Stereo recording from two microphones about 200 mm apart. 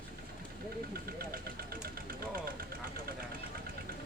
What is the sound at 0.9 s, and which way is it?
Speech, 50° right (ahead or behind).